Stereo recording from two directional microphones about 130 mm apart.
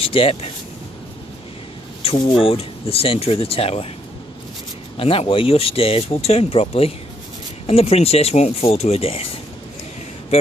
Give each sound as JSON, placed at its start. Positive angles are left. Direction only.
{"t": 0.0, "sound": "speech", "side_deg": 45}
{"t": 2.0, "sound": "speech", "side_deg": 40}
{"t": 4.9, "sound": "speech", "side_deg": 45}